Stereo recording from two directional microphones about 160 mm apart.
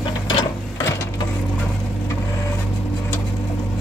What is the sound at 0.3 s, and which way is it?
Mechanisms, 30° left (ahead or behind).